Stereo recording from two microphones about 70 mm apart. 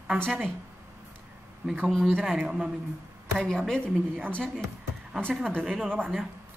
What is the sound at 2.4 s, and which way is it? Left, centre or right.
Speech, centre.